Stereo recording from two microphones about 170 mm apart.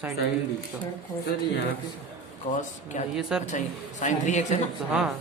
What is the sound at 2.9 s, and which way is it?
A man's voice, 45° left (ahead or behind).